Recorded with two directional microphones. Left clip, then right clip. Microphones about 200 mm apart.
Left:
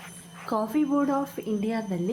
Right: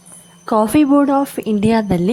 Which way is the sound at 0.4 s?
40° right (ahead or behind).